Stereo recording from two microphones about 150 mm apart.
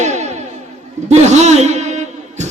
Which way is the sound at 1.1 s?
50° right (ahead or behind).